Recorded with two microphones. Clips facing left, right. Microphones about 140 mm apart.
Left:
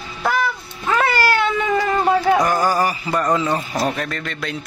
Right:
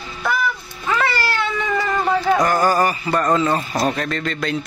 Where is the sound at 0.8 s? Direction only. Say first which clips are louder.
Left 3 dB; 50° left (ahead or behind).